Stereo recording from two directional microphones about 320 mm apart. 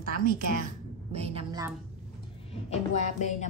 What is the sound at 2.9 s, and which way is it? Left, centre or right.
Music, left.